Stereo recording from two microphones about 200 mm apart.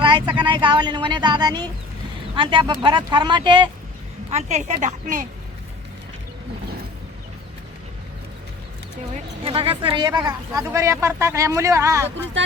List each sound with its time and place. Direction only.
0.0 s speech: 25° right (ahead or behind)
4.3 s a woman's voice: 35° right (ahead or behind)
9.4 s speech: 30° right (ahead or behind)